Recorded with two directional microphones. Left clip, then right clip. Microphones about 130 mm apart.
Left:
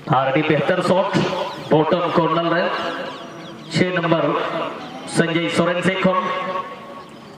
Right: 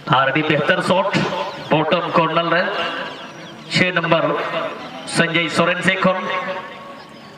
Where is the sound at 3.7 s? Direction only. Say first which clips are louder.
Right 3 dB; 35° right (ahead or behind).